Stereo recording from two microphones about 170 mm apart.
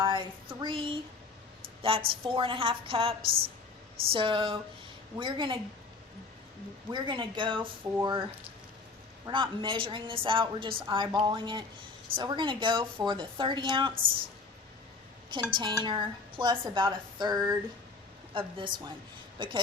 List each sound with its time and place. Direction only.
0.0 s a woman's voice: 30° right (ahead or behind)
3.2 s a woman's voice: 60° right (ahead or behind)
4.1 s a woman's voice: 30° right (ahead or behind)
6.9 s a woman's voice: 25° right (ahead or behind)
9.2 s a woman's voice: 30° right (ahead or behind)
15.3 s a woman's voice: 30° right (ahead or behind)